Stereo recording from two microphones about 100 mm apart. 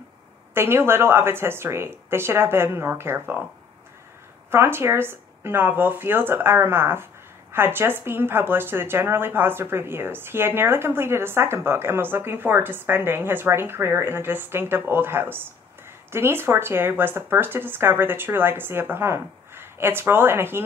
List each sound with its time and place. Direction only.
0.6 s speech: 25° right (ahead or behind)
4.5 s speech: 25° right (ahead or behind)